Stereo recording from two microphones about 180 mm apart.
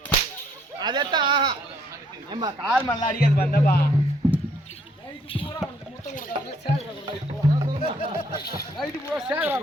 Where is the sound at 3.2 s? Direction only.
60° left (ahead or behind).